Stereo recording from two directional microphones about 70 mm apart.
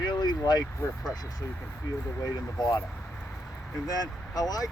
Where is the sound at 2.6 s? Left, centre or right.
Left.